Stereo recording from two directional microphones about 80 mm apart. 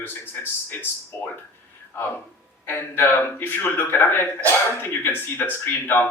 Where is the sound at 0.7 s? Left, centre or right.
Left.